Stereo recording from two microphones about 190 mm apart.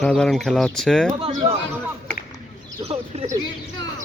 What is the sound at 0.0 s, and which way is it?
Speech, 5° left (ahead or behind).